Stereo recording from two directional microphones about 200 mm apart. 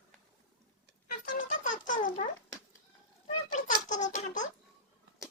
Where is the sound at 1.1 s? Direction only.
40° left (ahead or behind).